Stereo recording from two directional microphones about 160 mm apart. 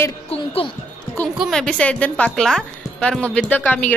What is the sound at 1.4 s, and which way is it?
A woman's voice, 5° left (ahead or behind).